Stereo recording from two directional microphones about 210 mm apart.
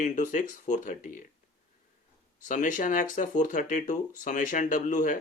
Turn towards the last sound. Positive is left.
turn(degrees=35)  # may be behind; listen again after turning